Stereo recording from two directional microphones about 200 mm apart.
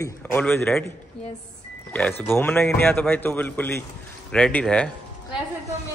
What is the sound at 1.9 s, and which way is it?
A man's voice, 5° left (ahead or behind).